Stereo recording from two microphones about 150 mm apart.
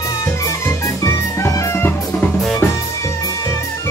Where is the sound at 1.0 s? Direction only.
20° left (ahead or behind).